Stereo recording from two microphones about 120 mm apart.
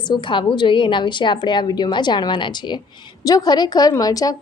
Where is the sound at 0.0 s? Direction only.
40° left (ahead or behind).